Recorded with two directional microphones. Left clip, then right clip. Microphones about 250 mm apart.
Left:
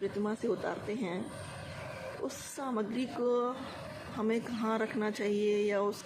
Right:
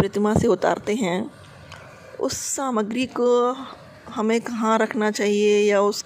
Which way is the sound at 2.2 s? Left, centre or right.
Right.